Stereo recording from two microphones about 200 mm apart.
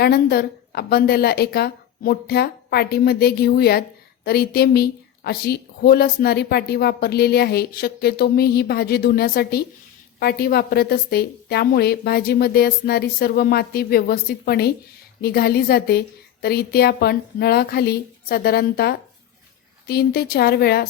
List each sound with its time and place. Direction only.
0.0 s a woman's voice: 50° left (ahead or behind)